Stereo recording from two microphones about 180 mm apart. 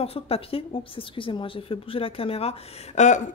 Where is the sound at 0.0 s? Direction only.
35° left (ahead or behind).